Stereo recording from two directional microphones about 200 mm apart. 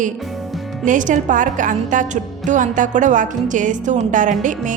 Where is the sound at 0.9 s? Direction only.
40° right (ahead or behind).